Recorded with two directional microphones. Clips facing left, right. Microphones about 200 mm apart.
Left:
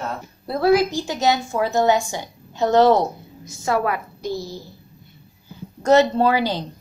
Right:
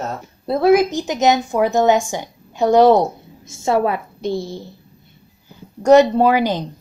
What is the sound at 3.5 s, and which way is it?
A woman's voice, 25° right (ahead or behind).